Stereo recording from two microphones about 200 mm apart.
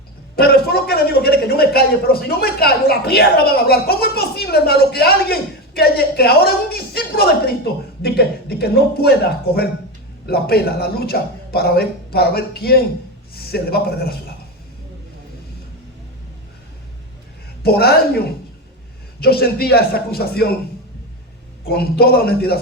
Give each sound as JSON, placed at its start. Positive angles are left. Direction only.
{"t": 0.3, "sound": "a man's voice", "side_deg": 50}
{"t": 17.6, "sound": "speech", "side_deg": 50}
{"t": 21.7, "sound": "speech", "side_deg": 50}